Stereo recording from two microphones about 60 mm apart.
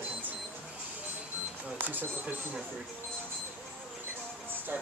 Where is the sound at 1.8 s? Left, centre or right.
Right.